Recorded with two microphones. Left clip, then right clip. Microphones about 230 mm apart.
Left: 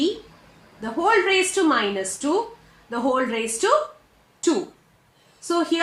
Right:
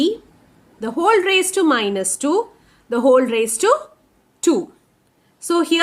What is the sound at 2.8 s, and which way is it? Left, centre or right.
Speech, right.